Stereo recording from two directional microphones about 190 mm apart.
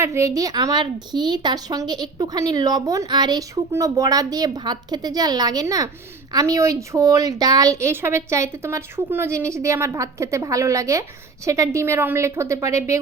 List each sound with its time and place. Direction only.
0.0 s a woman's voice: 15° right (ahead or behind)